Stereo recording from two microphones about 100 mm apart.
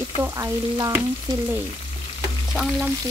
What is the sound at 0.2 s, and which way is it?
Frying, 30° right (ahead or behind).